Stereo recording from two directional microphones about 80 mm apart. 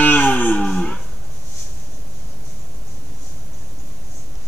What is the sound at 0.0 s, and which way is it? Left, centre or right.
Cattle, centre.